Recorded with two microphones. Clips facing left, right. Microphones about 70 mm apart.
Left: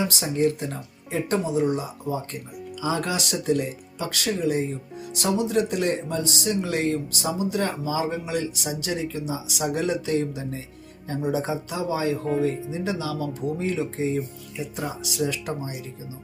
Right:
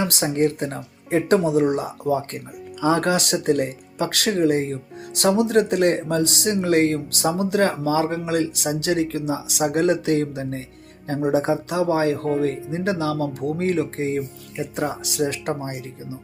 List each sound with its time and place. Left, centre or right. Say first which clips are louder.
0.0 s speech: right 2 dB; right
1.5 s speech: right 4 dB; right
2.8 s speech: right 7 dB; right